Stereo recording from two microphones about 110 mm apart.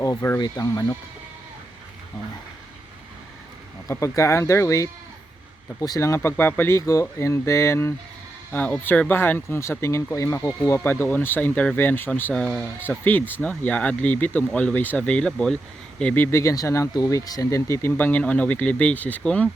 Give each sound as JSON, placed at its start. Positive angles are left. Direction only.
{"t": 0.0, "sound": "speech", "side_deg": 25}
{"t": 3.8, "sound": "speech", "side_deg": 30}
{"t": 8.5, "sound": "speech", "side_deg": 15}
{"t": 12.3, "sound": "speech", "side_deg": 5}
{"t": 13.1, "sound": "speech", "side_deg": 15}